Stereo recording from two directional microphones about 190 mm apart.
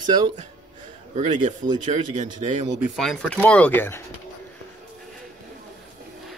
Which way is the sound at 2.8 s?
Centre (ahead or behind).